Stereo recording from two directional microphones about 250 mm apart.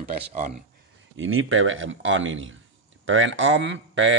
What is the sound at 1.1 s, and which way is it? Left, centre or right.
Speech, right.